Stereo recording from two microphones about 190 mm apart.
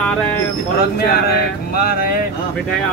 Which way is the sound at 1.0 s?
55° left (ahead or behind).